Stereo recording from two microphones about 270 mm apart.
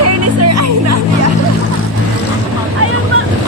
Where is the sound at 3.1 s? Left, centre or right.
Right.